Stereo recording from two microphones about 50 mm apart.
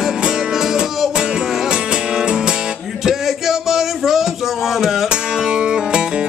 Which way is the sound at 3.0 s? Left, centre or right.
Centre.